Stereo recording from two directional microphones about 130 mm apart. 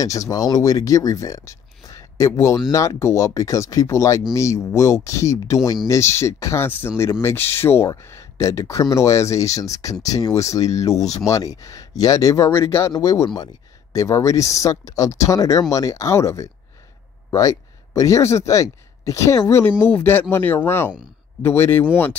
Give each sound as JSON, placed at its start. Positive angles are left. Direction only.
{"t": 0.0, "sound": "speech", "side_deg": 25}